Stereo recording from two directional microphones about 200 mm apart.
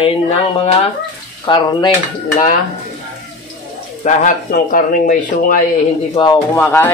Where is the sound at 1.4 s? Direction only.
25° left (ahead or behind).